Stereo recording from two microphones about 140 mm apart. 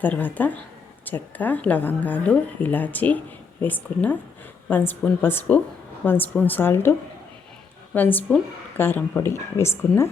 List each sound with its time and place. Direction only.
0.0 s speech: 10° left (ahead or behind)
7.9 s speech: 15° left (ahead or behind)